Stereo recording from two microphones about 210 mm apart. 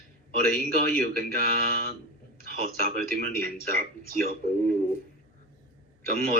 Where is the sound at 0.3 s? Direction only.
45° right (ahead or behind).